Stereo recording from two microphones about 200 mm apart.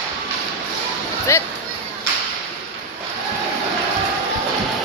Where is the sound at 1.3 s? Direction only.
15° left (ahead or behind).